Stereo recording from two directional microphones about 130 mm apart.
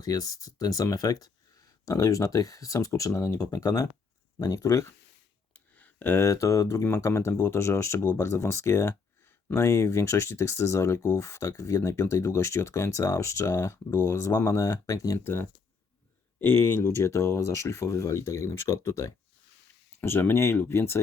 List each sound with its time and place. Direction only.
0.0 s speech: 25° left (ahead or behind)
5.5 s speech: 15° left (ahead or behind)